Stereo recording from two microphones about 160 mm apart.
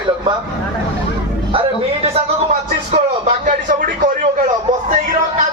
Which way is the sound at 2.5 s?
45° right (ahead or behind).